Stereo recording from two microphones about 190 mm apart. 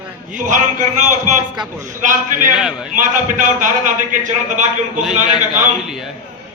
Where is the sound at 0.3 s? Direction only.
40° right (ahead or behind).